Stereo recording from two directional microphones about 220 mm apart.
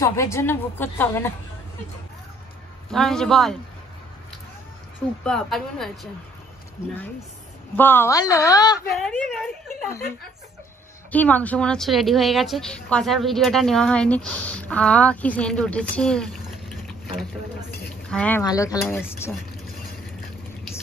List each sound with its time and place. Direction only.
0.0 s a woman's voice: 15° left (ahead or behind)
2.9 s a woman's voice: centre (ahead or behind)
5.2 s a woman's voice: centre (ahead or behind)
6.8 s a woman's voice: 15° left (ahead or behind)
8.9 s a woman's voice: centre (ahead or behind)
11.1 s a woman's voice: 5° left (ahead or behind)